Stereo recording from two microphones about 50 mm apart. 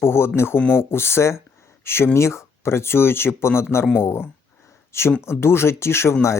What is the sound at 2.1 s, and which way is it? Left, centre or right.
Speech, left.